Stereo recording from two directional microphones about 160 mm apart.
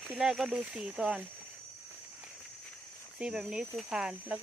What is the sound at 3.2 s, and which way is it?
Speech, 5° right (ahead or behind).